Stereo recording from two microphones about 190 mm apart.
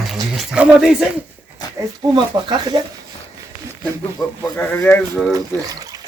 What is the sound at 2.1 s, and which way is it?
Speech, 25° right (ahead or behind).